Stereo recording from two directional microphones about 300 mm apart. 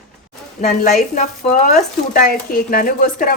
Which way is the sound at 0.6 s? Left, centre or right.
Left.